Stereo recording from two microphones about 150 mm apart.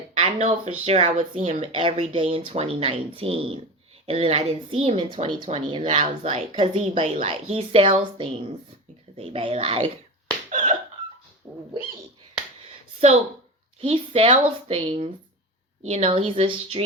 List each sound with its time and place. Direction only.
0.2 s a woman's voice: 50° right (ahead or behind)
1.6 s a woman's voice: 40° right (ahead or behind)
6.5 s a woman's voice: 35° right (ahead or behind)
10.5 s hiccup: 60° right (ahead or behind)
13.8 s a woman's voice: 40° right (ahead or behind)